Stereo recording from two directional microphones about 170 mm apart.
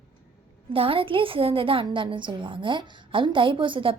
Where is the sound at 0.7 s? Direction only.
30° right (ahead or behind).